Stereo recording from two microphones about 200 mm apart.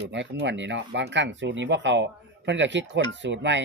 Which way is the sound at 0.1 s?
65° right (ahead or behind).